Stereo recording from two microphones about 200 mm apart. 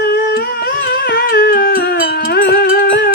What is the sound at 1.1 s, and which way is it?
Music, 50° left (ahead or behind).